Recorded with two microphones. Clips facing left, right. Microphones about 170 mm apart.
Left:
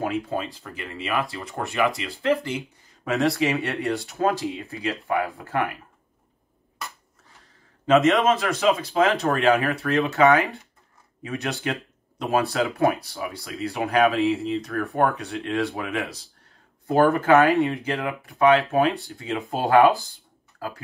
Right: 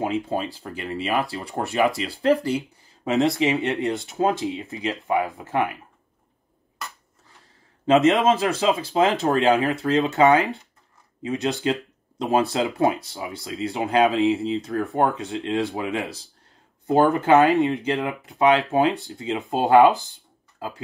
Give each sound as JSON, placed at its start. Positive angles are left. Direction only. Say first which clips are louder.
{"t": 0.0, "sound": "speech", "louder": "right 2 dB", "side_deg": -25}
{"t": 3.0, "sound": "speech", "louder": "right 2 dB", "side_deg": -20}
{"t": 7.8, "sound": "speech", "louder": "right 1 dB", "side_deg": -30}